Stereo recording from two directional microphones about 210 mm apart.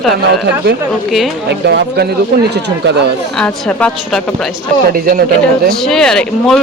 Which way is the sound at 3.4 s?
5° left (ahead or behind).